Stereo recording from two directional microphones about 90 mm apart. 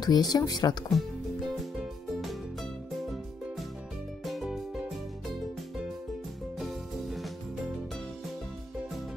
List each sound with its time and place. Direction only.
0.0 s speech: 50° left (ahead or behind)
0.8 s music: centre (ahead or behind)
4.2 s music: centre (ahead or behind)
6.6 s music: centre (ahead or behind)